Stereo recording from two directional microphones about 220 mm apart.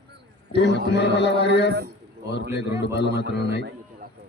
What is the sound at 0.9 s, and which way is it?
Speech, 50° left (ahead or behind).